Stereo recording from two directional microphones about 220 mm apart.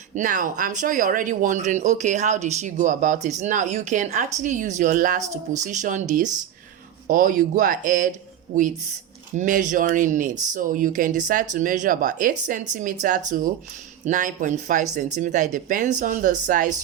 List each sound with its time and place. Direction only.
0.1 s speech: 35° right (ahead or behind)
9.3 s speech: 35° right (ahead or behind)